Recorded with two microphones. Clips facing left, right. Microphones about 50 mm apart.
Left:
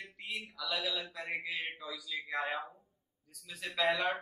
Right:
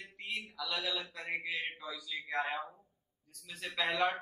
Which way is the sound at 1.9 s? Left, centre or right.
Centre.